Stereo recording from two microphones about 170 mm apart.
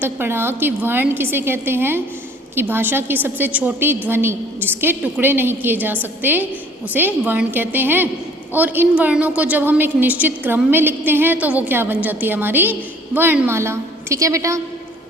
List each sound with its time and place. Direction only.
0.0 s a woman's voice: 15° right (ahead or behind)